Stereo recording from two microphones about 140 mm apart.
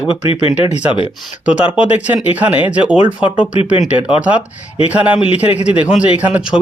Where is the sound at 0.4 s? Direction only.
40° left (ahead or behind).